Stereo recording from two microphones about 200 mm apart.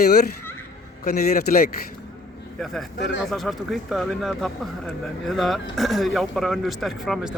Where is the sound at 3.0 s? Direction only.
60° left (ahead or behind).